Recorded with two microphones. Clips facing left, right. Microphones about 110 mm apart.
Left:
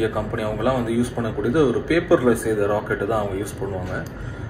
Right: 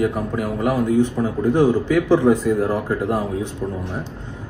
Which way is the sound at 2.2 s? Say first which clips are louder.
Right 2 dB; 20° right (ahead or behind).